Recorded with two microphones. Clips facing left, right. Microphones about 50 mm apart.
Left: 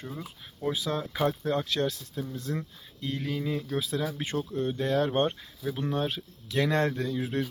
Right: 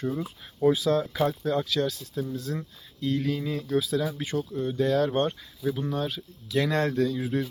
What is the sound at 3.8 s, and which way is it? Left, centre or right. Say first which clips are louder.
Speech: right 4 dB; left.